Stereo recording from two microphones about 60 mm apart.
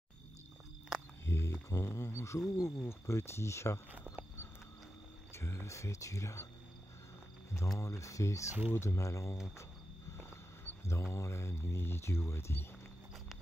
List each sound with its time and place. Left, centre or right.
1.2 s a sound: left
2.5 s speech: left
5.3 s speech: left
7.5 s speech: left
10.1 s a sound: left
10.9 s speech: left